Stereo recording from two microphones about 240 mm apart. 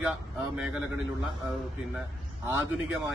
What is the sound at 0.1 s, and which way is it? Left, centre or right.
A man's voice, centre.